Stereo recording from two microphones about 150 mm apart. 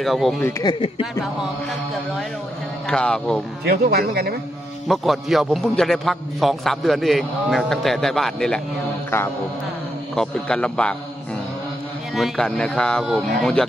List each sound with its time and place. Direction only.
0.0 s a man's voice: centre (ahead or behind)
0.4 s a man's voice: 20° left (ahead or behind)
0.7 s speech: 35° left (ahead or behind)
2.9 s a man's voice: 5° left (ahead or behind)
3.6 s speech: 90° right
4.8 s a man's voice: centre (ahead or behind)
9.1 s a man's voice: 15° left (ahead or behind)
10.1 s a man's voice: 5° left (ahead or behind)
12.2 s a man's voice: 5° left (ahead or behind)